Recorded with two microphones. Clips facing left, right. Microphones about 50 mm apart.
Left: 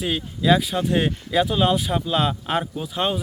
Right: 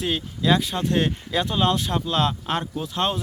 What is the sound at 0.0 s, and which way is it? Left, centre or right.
Speech, centre.